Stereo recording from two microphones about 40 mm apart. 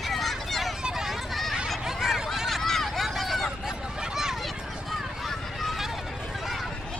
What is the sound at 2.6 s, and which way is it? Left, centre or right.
Hubbub, centre.